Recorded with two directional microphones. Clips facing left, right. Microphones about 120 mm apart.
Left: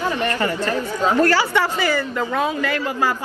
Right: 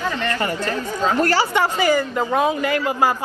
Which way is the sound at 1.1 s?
15° right (ahead or behind).